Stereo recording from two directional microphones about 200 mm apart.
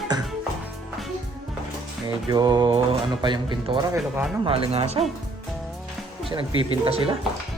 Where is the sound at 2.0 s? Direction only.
20° right (ahead or behind).